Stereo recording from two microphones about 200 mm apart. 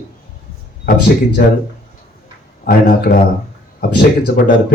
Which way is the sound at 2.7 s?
45° left (ahead or behind).